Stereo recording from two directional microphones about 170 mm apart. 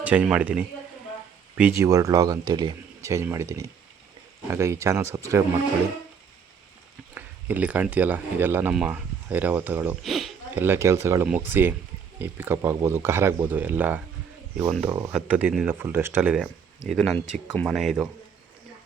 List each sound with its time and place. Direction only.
0.0 s speech: 10° right (ahead or behind)
7.1 s speech: 10° right (ahead or behind)
10.0 s a sound: centre (ahead or behind)
10.6 s speech: 15° right (ahead or behind)
15.1 s speech: 10° right (ahead or behind)